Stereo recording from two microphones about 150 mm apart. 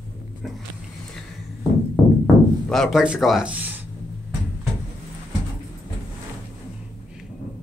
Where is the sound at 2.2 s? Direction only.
Centre (ahead or behind).